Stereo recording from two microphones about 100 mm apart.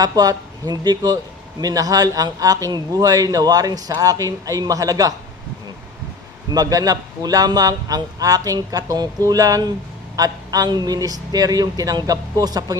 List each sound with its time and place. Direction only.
0.0 s a man's voice: 40° right (ahead or behind)
6.5 s a man's voice: 40° right (ahead or behind)